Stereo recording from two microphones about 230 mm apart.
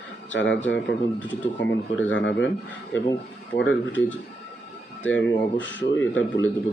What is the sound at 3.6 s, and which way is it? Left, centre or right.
Speech, left.